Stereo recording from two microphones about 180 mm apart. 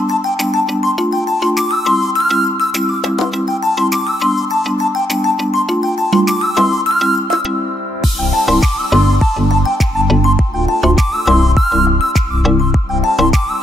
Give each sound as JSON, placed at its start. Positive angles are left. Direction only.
{"t": 1.4, "sound": "music", "side_deg": 0}
{"t": 6.1, "sound": "music", "side_deg": 0}
{"t": 8.5, "sound": "music", "side_deg": 0}
{"t": 10.2, "sound": "music", "side_deg": 0}
{"t": 13.0, "sound": "music", "side_deg": 0}